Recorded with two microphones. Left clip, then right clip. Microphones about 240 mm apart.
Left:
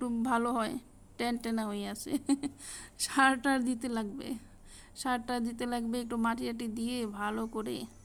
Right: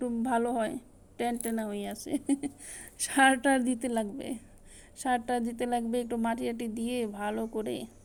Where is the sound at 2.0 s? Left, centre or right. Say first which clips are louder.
Even; left.